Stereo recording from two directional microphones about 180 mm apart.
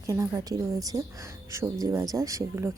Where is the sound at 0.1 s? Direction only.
20° right (ahead or behind).